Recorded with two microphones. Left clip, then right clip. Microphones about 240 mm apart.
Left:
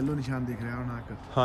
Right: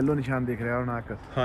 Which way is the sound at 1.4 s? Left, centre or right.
Centre.